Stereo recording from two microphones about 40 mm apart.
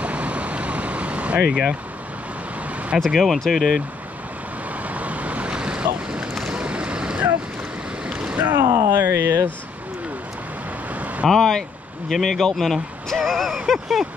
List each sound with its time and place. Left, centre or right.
0.0 s vehicle: right
1.5 s speech: centre
3.2 s speech: centre
4.8 s waves: right
6.4 s boat: right
8.5 s speech: right
11.2 s speech: centre